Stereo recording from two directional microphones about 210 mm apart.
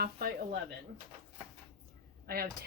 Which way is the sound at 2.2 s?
45° right (ahead or behind).